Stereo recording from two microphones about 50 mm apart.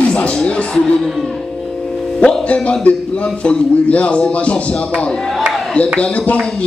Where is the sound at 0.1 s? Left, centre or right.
Centre.